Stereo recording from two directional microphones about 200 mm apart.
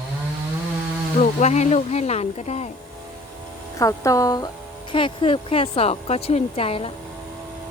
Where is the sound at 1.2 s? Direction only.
35° left (ahead or behind).